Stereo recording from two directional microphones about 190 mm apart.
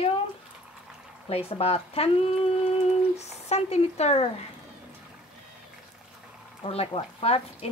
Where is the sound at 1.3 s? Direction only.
30° left (ahead or behind).